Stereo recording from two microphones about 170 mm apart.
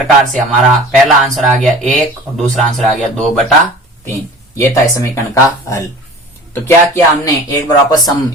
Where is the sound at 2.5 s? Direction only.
Centre (ahead or behind).